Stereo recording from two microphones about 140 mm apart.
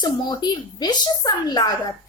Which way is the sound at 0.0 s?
30° left (ahead or behind).